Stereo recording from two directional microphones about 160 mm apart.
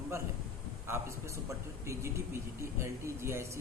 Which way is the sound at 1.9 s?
15° right (ahead or behind).